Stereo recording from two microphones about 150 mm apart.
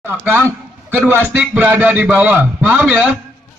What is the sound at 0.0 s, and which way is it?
A man's voice, 15° right (ahead or behind).